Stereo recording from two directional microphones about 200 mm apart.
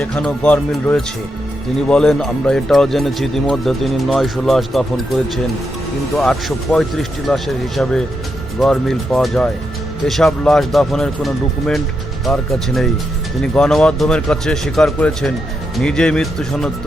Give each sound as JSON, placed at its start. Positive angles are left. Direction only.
{"t": 0.0, "sound": "speech", "side_deg": 5}
{"t": 6.1, "sound": "speech", "side_deg": 5}